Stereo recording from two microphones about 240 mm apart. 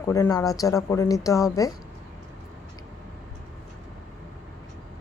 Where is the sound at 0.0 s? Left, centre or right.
Centre.